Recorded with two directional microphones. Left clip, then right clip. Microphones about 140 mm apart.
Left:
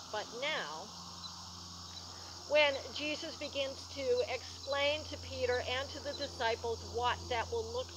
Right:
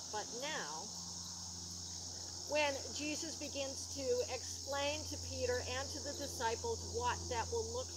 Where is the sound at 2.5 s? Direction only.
35° right (ahead or behind).